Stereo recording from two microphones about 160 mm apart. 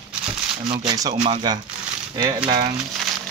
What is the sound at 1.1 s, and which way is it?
Speech, 35° right (ahead or behind).